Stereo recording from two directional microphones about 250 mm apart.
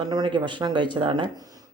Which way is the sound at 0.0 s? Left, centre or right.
Centre.